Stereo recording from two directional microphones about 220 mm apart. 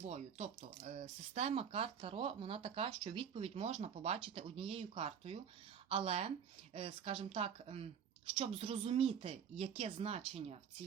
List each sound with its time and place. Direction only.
0.0 s speech: 30° right (ahead or behind)